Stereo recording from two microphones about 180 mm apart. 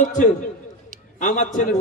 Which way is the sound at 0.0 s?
45° left (ahead or behind).